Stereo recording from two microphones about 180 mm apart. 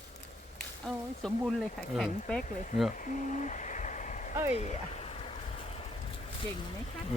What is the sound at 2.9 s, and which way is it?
Owl, 45° left (ahead or behind).